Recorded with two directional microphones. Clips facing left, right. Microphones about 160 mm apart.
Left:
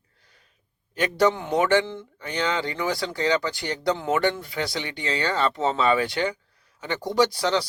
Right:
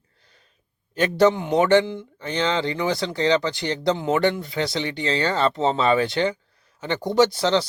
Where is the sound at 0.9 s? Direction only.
25° right (ahead or behind).